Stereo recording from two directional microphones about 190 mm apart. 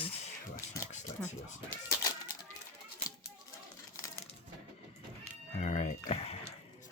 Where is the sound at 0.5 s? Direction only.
40° left (ahead or behind).